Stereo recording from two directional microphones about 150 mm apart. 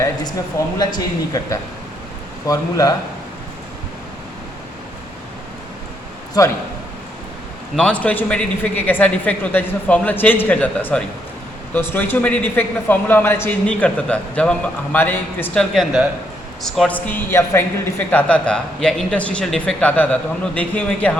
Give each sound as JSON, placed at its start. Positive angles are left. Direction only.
{"t": 0.8, "sound": "speech", "side_deg": 25}
{"t": 7.8, "sound": "speech", "side_deg": 10}
{"t": 15.7, "sound": "speech", "side_deg": 0}